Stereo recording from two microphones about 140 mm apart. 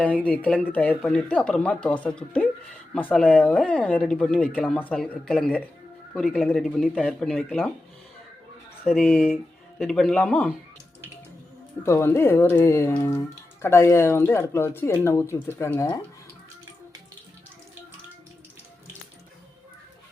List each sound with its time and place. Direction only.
0.0 s speech: 10° left (ahead or behind)
8.8 s speech: centre (ahead or behind)
11.8 s speech: 20° left (ahead or behind)